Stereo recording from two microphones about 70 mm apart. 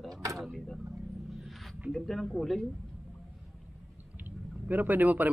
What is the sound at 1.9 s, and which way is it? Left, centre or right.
Speech, centre.